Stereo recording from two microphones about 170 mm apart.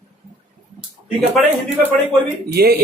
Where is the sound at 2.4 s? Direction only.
65° right (ahead or behind).